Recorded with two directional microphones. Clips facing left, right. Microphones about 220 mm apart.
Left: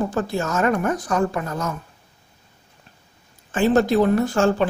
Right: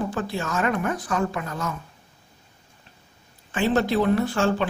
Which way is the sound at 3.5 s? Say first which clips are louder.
Left 4 dB; 45° left (ahead or behind).